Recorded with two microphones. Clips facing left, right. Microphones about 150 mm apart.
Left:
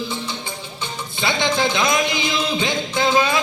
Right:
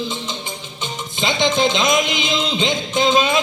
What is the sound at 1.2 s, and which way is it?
Music, 20° right (ahead or behind).